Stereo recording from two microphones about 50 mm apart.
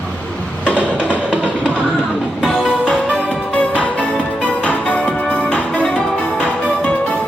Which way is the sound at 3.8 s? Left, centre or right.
Left.